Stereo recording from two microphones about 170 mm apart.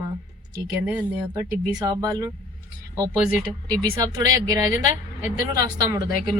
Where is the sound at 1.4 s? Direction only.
20° right (ahead or behind).